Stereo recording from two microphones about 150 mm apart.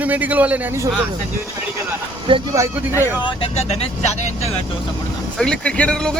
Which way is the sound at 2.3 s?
35° right (ahead or behind).